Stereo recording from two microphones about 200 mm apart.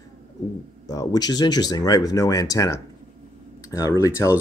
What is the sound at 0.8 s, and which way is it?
Speech, 20° left (ahead or behind).